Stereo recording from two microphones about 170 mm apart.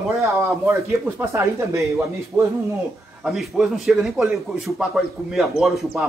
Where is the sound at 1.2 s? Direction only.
15° right (ahead or behind).